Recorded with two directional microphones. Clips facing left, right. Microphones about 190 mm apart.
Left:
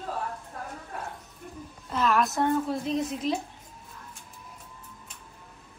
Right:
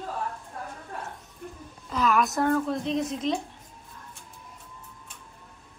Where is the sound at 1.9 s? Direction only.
Centre (ahead or behind).